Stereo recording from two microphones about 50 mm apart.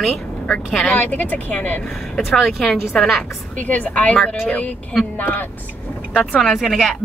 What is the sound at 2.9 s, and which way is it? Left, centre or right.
Speech, centre.